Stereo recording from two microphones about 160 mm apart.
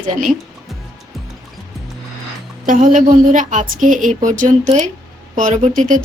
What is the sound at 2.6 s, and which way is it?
A woman's voice, 60° right (ahead or behind).